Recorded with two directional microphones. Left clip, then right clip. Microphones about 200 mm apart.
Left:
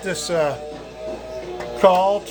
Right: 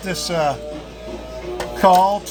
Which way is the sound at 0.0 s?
25° left (ahead or behind).